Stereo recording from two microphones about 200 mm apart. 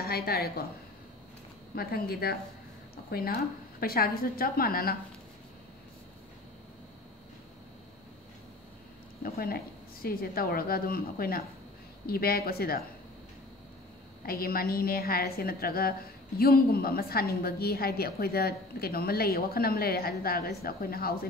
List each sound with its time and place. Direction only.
0.0 s a woman's voice: 50° left (ahead or behind)
1.8 s a woman's voice: 50° left (ahead or behind)
9.2 s a woman's voice: 50° left (ahead or behind)
14.2 s a woman's voice: 50° left (ahead or behind)